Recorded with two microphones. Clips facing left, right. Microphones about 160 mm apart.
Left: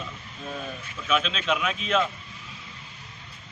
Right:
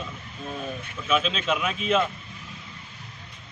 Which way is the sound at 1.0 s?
Centre (ahead or behind).